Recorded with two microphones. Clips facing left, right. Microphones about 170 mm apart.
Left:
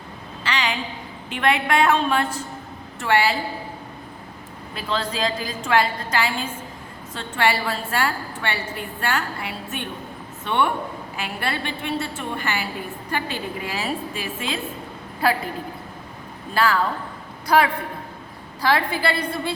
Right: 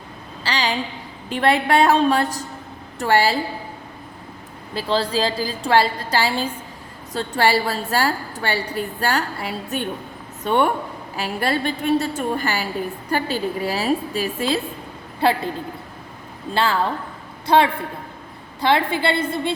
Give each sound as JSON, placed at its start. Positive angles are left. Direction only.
{"t": 0.4, "sound": "a sound", "side_deg": -35}
{"t": 1.3, "sound": "a woman's voice", "side_deg": -35}
{"t": 4.7, "sound": "a woman's voice", "side_deg": -30}
{"t": 16.6, "sound": "a woman's voice", "side_deg": -25}